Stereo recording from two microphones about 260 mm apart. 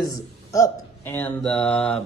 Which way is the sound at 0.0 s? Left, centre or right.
Centre.